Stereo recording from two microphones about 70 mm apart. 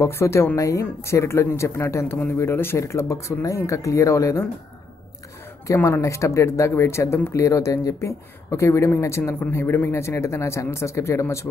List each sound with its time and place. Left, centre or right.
0.0 s speech: left
2.8 s speech: left
5.9 s speech: left